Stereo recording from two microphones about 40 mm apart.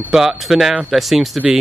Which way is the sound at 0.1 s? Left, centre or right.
Centre.